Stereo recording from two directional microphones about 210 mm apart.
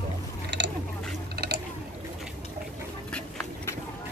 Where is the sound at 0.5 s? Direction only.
55° right (ahead or behind).